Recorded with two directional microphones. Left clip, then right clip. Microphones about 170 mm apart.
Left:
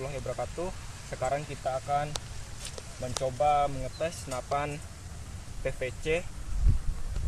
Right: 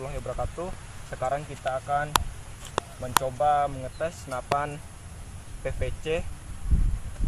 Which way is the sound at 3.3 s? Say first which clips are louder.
Left 1 dB; 15° left (ahead or behind).